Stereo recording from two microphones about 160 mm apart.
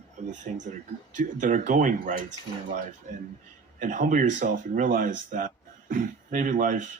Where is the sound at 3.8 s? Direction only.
55° right (ahead or behind).